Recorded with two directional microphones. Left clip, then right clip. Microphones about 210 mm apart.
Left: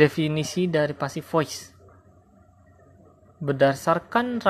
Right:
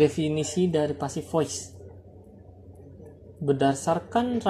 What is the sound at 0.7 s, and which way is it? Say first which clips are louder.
Speech: left 2 dB; 50° left (ahead or behind).